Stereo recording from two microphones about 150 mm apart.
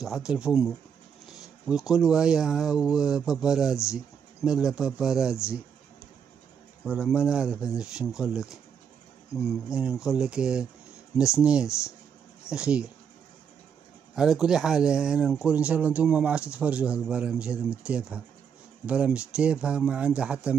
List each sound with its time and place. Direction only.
0.0 s speech: centre (ahead or behind)
3.7 s a sound: 20° left (ahead or behind)
4.5 s speech: 5° right (ahead or behind)
6.9 s speech: 5° right (ahead or behind)
9.3 s speech: 5° right (ahead or behind)
14.1 s speech: centre (ahead or behind)